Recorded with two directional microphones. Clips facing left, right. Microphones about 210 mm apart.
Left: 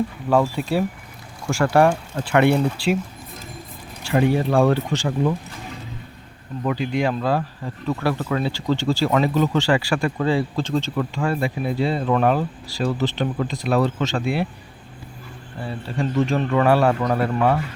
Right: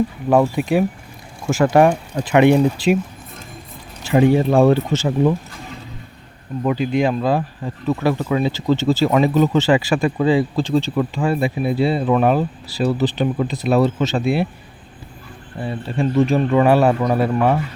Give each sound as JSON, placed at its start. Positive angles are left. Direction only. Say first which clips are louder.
{"t": 0.3, "sound": "speech", "louder": "right 4 dB", "side_deg": -15}
{"t": 4.1, "sound": "speech", "louder": "right 4 dB", "side_deg": -20}
{"t": 6.7, "sound": "speech", "louder": "right 4 dB", "side_deg": -15}
{"t": 15.6, "sound": "speech", "louder": "right 4 dB", "side_deg": -15}